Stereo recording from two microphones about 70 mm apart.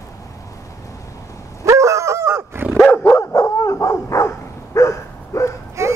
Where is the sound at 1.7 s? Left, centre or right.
Right.